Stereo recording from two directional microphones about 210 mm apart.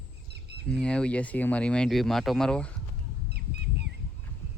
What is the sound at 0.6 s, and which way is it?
Speech, 5° left (ahead or behind).